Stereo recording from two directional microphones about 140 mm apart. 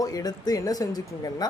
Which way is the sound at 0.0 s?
25° left (ahead or behind).